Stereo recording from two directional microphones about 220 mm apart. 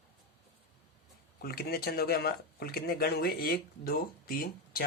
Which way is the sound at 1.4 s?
45° left (ahead or behind).